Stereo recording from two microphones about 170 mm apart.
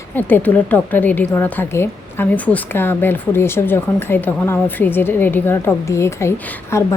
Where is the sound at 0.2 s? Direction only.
10° left (ahead or behind).